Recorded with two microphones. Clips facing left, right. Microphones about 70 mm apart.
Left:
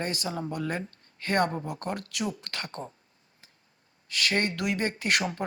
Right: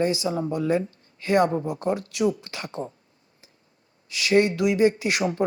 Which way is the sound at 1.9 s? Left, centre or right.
Left.